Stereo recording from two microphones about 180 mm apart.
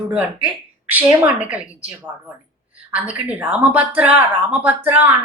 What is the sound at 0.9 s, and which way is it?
A woman's voice, 10° right (ahead or behind).